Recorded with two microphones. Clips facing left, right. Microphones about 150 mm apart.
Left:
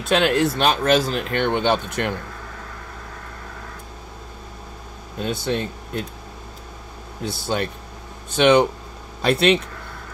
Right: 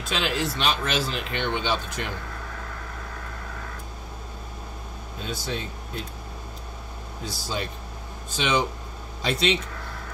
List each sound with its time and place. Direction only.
0.1 s speech: 55° left (ahead or behind)
0.6 s speech: 45° left (ahead or behind)
5.2 s speech: 60° left (ahead or behind)
7.2 s speech: 60° left (ahead or behind)